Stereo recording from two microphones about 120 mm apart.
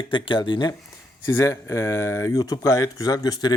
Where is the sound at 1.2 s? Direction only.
25° left (ahead or behind).